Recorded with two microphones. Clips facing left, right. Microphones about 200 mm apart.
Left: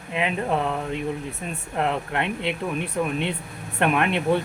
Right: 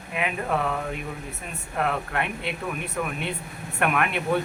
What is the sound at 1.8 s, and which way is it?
Speech, 25° left (ahead or behind).